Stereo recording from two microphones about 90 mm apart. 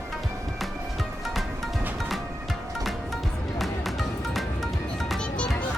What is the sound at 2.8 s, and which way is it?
Music, centre (ahead or behind).